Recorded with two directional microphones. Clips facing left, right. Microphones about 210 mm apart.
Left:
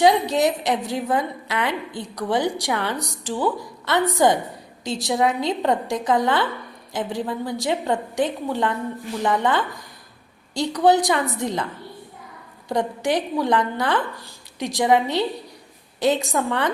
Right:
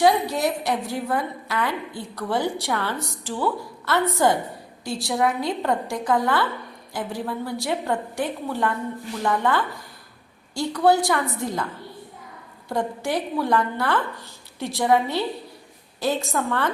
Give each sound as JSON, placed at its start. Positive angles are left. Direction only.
{"t": 0.0, "sound": "a woman's voice", "side_deg": 20}
{"t": 12.6, "sound": "a woman's voice", "side_deg": 15}